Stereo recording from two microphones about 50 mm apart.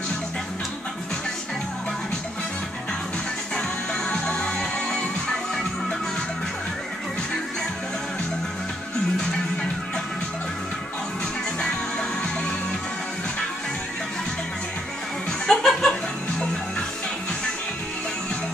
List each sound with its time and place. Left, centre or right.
4.1 s music: centre
15.4 s chuckle: centre